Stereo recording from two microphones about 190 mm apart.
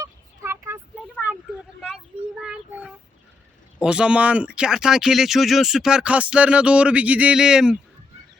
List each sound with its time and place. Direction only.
0.0 s vehicle: 15° right (ahead or behind)
1.0 s vehicle: 5° left (ahead or behind)
2.4 s child singing: 5° right (ahead or behind)
3.8 s speech: 5° right (ahead or behind)